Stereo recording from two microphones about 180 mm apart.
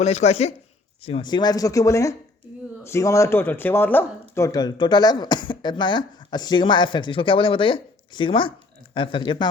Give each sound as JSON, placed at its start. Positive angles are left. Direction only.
{"t": 0.0, "sound": "speech", "side_deg": 40}